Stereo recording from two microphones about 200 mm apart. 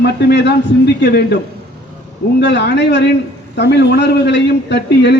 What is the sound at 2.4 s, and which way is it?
A man's voice, 60° left (ahead or behind).